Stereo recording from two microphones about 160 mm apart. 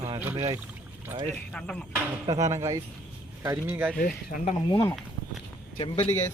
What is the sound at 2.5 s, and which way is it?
Speech, 20° right (ahead or behind).